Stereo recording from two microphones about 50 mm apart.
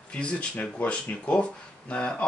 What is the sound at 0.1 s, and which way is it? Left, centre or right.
Speech, left.